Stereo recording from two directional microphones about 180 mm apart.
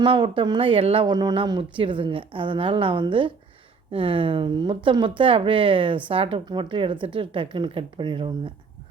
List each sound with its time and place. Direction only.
0.0 s speech: 30° right (ahead or behind)